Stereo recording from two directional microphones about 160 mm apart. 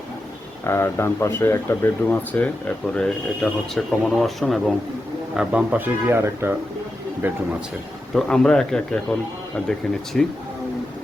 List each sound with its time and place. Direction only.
0.6 s speech: 15° left (ahead or behind); by 6.6 s 15° right (ahead or behind)
8.1 s speech: 5° left (ahead or behind)